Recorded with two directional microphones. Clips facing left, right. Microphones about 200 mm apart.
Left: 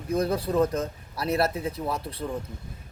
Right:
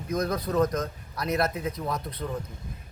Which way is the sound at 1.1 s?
30° left (ahead or behind).